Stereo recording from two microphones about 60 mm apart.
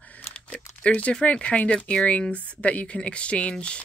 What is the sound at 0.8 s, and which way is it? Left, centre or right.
Speech, centre.